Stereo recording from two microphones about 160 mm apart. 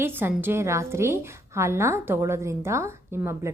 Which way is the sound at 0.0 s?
15° right (ahead or behind).